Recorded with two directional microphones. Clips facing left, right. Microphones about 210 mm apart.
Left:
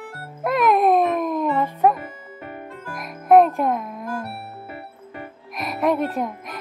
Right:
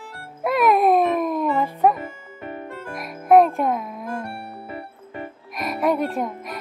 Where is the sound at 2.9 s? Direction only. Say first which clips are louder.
Even; centre (ahead or behind).